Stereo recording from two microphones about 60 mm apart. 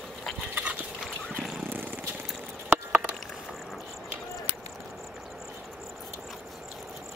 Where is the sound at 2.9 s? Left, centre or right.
Right.